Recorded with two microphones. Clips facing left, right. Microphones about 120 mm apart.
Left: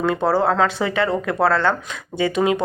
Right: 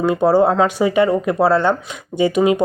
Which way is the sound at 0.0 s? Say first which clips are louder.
Right 5 dB; 15° right (ahead or behind).